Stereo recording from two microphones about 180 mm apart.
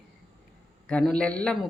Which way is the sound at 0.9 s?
5° left (ahead or behind).